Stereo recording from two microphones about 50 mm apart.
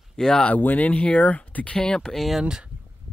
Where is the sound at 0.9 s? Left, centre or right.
Left.